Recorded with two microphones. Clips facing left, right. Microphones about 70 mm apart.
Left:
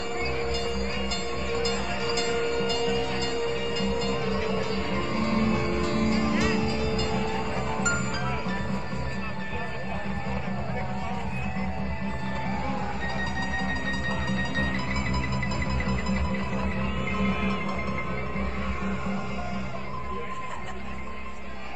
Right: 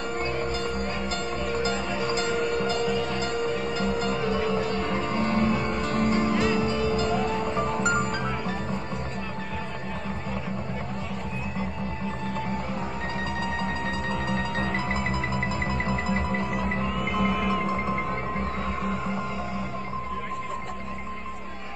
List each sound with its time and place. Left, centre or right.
0.5 s music: right
17.2 s music: right